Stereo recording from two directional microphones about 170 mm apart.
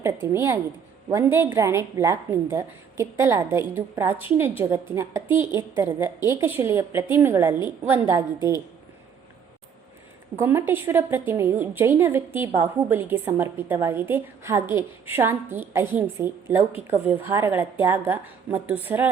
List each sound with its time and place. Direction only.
0.0 s a woman's voice: 15° right (ahead or behind)
10.3 s a woman's voice: 15° right (ahead or behind)